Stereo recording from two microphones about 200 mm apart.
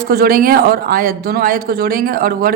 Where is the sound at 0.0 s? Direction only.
50° right (ahead or behind).